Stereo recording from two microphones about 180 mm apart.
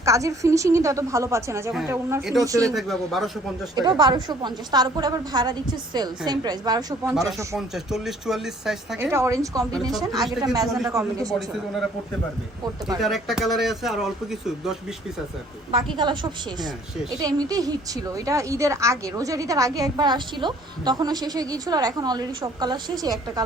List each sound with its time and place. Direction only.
0.0 s a woman's voice: 15° right (ahead or behind)
2.6 s speech: centre (ahead or behind)
3.8 s a woman's voice: 25° right (ahead or behind)
7.3 s speech: centre (ahead or behind)
9.0 s a woman's voice: 15° right (ahead or behind)
11.3 s speech: centre (ahead or behind)
13.0 s speech: centre (ahead or behind)
16.0 s a woman's voice: 25° right (ahead or behind)